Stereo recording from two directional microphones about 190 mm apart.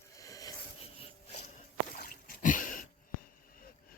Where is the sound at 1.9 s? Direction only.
50° left (ahead or behind).